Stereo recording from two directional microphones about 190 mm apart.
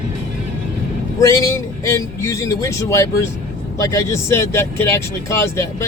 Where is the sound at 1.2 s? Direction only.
15° left (ahead or behind).